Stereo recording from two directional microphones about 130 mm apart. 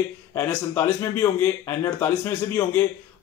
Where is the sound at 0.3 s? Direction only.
15° left (ahead or behind).